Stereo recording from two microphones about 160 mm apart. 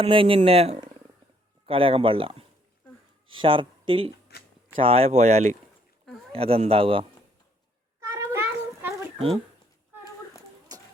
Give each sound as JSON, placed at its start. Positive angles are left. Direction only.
{"t": 0.0, "sound": "speech", "side_deg": -35}
{"t": 3.3, "sound": "speech", "side_deg": -30}
{"t": 4.3, "sound": "a sound", "side_deg": 90}
{"t": 4.8, "sound": "speech", "side_deg": -40}
{"t": 8.0, "sound": "cat", "side_deg": -15}
{"t": 10.7, "sound": "a sound", "side_deg": -25}